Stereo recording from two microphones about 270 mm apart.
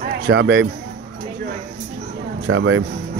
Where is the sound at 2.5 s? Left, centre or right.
Right.